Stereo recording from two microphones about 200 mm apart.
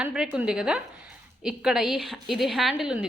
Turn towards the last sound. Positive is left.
turn(degrees=-5)  # may be behind; listen again after turning